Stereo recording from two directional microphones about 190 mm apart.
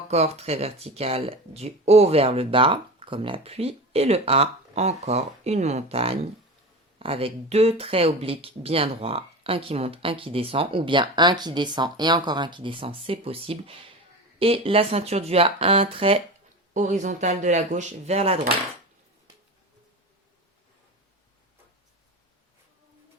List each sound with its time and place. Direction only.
0.1 s speech: 35° right (ahead or behind)